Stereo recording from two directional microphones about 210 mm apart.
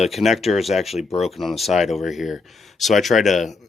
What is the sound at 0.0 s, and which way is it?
Speech, centre (ahead or behind).